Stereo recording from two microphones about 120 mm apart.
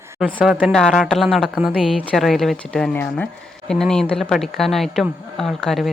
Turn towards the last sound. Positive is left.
turn(degrees=0)  # may be behind; listen again after turning